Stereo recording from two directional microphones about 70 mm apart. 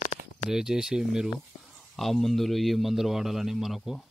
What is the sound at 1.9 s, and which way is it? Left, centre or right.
Speech, centre.